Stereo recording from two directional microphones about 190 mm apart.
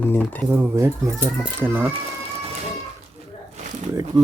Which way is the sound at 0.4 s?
15° right (ahead or behind).